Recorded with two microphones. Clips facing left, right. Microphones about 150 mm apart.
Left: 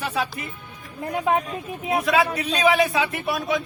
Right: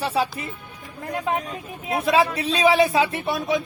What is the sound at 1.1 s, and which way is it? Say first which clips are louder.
Speech: left 3 dB; 25° left (ahead or behind).